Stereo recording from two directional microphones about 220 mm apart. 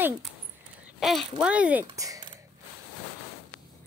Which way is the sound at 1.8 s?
15° right (ahead or behind).